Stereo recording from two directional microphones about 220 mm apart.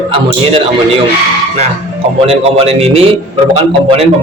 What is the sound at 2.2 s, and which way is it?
A man's voice, 25° right (ahead or behind).